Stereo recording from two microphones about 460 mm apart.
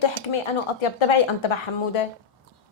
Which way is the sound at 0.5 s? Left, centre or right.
Left.